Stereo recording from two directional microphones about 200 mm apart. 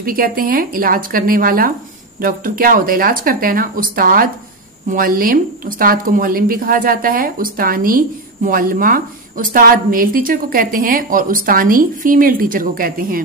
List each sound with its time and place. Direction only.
0.0 s a woman's voice: 45° right (ahead or behind)